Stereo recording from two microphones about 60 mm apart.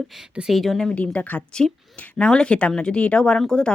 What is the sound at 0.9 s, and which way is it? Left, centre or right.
Speech, left.